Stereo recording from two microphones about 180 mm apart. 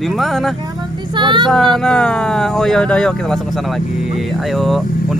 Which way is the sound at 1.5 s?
Centre (ahead or behind).